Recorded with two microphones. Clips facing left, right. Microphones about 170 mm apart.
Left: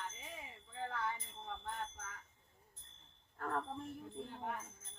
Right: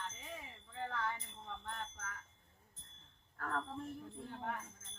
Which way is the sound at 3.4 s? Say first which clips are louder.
Left 2 dB; 20° left (ahead or behind).